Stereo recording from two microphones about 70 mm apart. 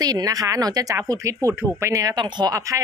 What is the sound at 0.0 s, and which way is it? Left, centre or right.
Speech, right.